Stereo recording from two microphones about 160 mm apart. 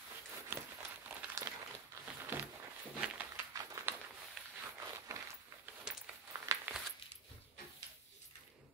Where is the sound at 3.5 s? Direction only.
15° right (ahead or behind).